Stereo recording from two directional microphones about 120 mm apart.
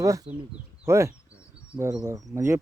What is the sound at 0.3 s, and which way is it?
Speech, 55° right (ahead or behind).